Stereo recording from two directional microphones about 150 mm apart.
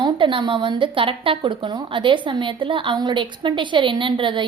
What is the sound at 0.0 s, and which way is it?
A woman's voice, 30° right (ahead or behind).